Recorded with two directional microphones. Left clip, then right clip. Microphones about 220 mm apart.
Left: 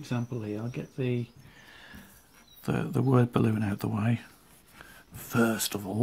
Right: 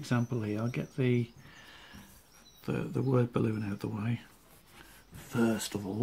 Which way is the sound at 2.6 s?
30° left (ahead or behind).